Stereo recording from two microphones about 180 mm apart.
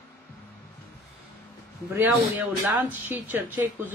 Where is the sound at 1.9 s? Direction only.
10° right (ahead or behind).